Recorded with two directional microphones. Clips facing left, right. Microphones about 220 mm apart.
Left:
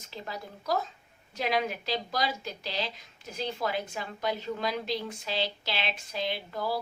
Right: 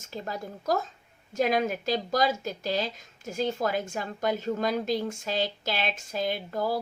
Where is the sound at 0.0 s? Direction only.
45° right (ahead or behind).